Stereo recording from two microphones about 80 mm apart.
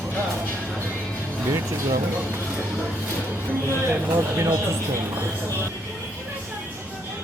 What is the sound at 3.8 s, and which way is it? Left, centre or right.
Speech, right.